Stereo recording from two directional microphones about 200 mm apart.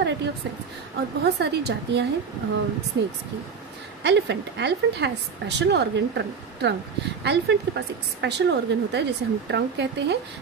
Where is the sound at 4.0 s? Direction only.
60° right (ahead or behind).